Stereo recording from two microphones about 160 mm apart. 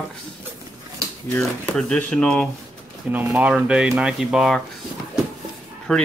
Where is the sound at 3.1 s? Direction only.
10° right (ahead or behind).